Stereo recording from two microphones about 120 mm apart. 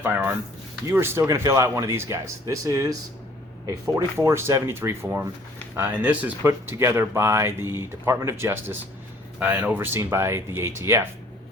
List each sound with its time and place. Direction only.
0.0 s speech: 10° right (ahead or behind); by 2.8 s 30° right (ahead or behind)
3.9 s speech: 25° right (ahead or behind)